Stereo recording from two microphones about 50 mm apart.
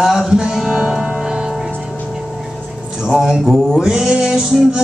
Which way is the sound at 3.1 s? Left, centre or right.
Centre.